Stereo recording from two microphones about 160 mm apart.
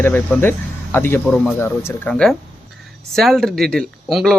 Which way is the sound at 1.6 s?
15° left (ahead or behind).